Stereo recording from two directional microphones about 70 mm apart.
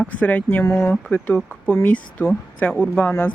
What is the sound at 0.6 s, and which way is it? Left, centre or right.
Speech, left.